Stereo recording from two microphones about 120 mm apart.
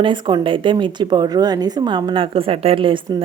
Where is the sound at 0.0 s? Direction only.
40° right (ahead or behind).